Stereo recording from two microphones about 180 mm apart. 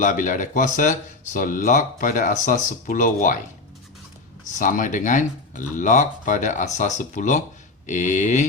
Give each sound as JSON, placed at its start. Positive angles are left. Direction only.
{"t": 0.0, "sound": "speech", "side_deg": 45}
{"t": 4.5, "sound": "speech", "side_deg": 45}